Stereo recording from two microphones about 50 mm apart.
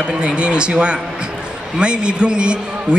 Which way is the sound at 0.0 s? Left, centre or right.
Right.